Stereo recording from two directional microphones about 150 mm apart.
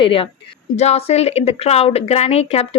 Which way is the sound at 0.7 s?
45° left (ahead or behind).